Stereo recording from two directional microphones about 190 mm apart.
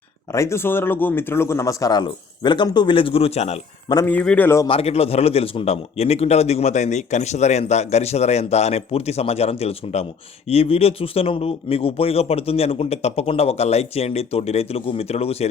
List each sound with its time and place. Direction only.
0.3 s speech: 15° left (ahead or behind); by 3.9 s 35° left (ahead or behind)
3.9 s a man's voice: 10° left (ahead or behind)
4.6 s a man's voice: 30° left (ahead or behind)